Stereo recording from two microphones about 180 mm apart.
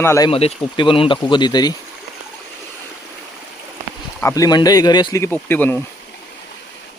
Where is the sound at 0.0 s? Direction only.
15° left (ahead or behind).